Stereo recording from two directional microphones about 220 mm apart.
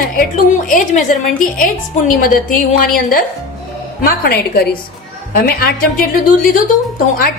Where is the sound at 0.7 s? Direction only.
35° left (ahead or behind).